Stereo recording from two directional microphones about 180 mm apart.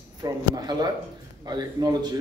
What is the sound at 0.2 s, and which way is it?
A man's voice, 20° right (ahead or behind).